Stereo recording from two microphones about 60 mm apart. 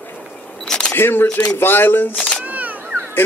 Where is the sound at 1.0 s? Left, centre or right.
Left.